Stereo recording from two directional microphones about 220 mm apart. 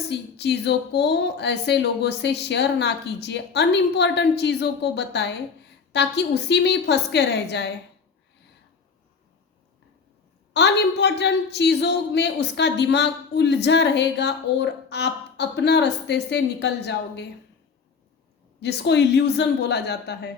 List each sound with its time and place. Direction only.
0.1 s a woman's voice: 50° left (ahead or behind)
10.5 s a woman's voice: 50° left (ahead or behind)
18.6 s a woman's voice: 50° left (ahead or behind)